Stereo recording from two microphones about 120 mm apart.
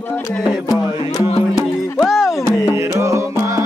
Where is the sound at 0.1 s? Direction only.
10° left (ahead or behind).